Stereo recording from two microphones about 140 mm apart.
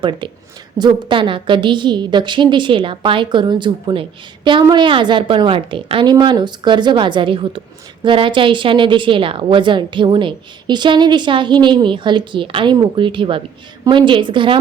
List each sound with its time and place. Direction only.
0.0 s a woman's voice: 35° right (ahead or behind)